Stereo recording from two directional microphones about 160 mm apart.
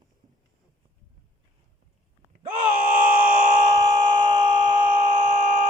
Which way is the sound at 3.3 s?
50° right (ahead or behind).